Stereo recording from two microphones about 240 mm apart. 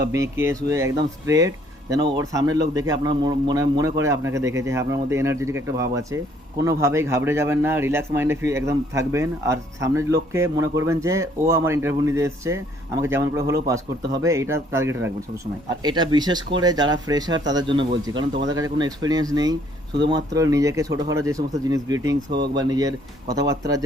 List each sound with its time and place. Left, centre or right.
0.1 s speech: centre